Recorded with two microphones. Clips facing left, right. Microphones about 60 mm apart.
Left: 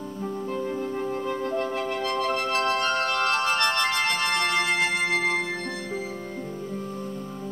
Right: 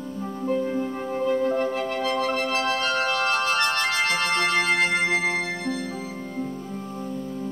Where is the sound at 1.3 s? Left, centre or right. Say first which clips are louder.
Right 5 dB; centre.